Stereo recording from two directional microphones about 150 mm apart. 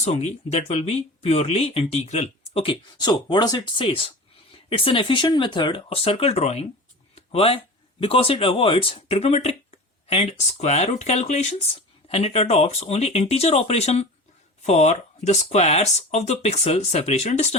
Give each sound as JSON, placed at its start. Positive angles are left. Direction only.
{"t": 0.0, "sound": "speech", "side_deg": 45}
{"t": 3.0, "sound": "speech", "side_deg": 30}